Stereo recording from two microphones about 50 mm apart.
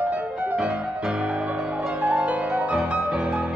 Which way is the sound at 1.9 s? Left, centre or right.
Right.